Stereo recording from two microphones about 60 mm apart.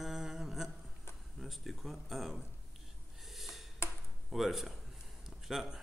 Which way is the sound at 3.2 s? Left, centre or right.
Centre.